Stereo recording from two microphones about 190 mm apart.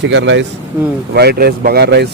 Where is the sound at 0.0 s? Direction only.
70° right (ahead or behind).